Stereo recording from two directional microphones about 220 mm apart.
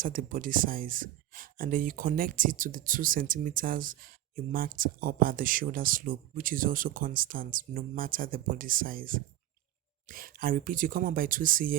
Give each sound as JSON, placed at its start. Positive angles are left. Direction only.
{"t": 0.0, "sound": "speech", "side_deg": -40}